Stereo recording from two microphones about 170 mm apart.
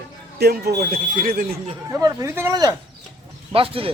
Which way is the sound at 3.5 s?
30° right (ahead or behind).